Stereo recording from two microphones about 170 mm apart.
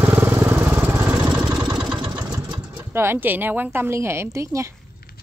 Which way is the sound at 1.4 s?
20° right (ahead or behind).